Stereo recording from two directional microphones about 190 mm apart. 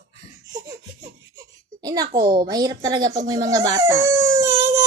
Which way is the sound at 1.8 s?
20° right (ahead or behind).